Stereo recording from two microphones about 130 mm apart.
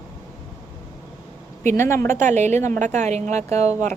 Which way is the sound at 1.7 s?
20° left (ahead or behind).